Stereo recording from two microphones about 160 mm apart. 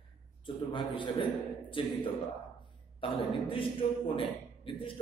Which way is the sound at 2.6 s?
30° left (ahead or behind).